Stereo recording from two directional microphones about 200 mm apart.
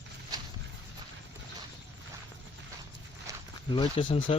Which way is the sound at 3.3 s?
15° right (ahead or behind).